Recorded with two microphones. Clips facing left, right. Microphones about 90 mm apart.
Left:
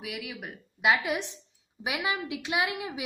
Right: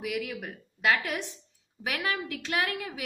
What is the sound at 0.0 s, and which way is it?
A woman's voice, 5° left (ahead or behind).